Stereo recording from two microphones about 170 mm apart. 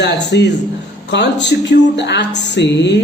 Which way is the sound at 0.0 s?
90° left.